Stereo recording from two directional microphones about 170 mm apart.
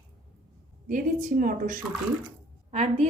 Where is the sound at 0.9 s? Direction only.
50° right (ahead or behind).